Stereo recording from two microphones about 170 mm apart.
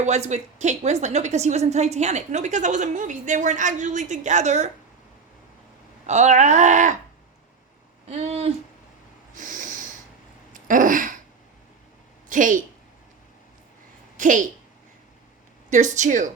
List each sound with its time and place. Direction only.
0.0 s a woman's voice: 40° right (ahead or behind)
6.1 s a woman's voice: 45° right (ahead or behind)
8.2 s speech: 35° right (ahead or behind)
9.4 s snort: 50° right (ahead or behind)
10.5 s a sound: 50° right (ahead or behind)
12.3 s a woman's voice: 50° right (ahead or behind)
14.2 s a woman's voice: 50° right (ahead or behind)
15.7 s a woman's voice: 45° right (ahead or behind)